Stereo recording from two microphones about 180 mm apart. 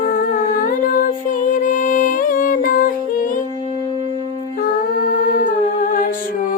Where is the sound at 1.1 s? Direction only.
45° left (ahead or behind).